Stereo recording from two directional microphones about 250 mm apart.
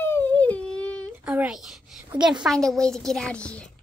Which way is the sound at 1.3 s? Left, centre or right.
Centre.